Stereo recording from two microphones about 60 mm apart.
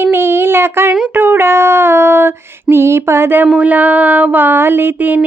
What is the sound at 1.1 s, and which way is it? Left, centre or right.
Female singing, right.